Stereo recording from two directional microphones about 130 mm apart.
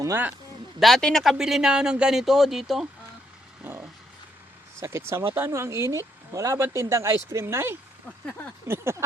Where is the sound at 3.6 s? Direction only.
15° right (ahead or behind).